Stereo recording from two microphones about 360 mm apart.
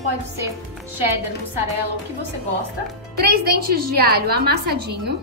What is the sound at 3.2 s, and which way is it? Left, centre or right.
A woman's voice, right.